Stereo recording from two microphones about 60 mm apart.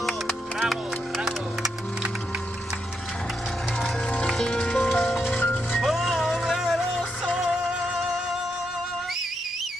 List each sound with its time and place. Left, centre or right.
0.6 s music: centre
3.8 s music: left
4.3 s music: centre
4.8 s music: centre
5.3 s music: left
5.8 s music: centre